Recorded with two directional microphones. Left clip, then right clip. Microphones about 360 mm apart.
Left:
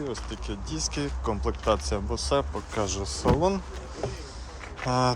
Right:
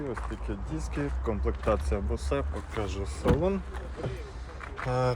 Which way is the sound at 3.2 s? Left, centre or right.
Centre.